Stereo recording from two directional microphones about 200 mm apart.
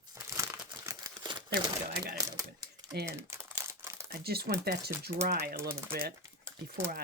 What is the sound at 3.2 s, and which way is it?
Crumpling, 10° right (ahead or behind).